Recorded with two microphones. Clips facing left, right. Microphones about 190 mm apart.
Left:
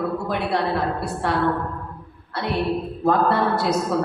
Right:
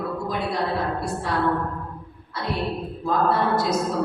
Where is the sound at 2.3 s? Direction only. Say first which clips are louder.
Left 4 dB; 65° left (ahead or behind).